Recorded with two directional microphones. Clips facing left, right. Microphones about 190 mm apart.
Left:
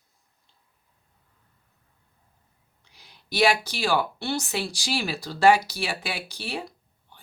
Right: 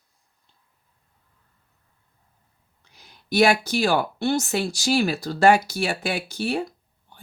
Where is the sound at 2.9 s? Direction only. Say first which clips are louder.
Right 8 dB; 50° right (ahead or behind).